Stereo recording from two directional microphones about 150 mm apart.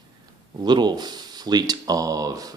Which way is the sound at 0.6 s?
30° right (ahead or behind).